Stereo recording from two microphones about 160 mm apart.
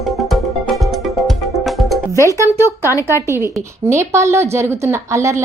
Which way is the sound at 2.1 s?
20° left (ahead or behind).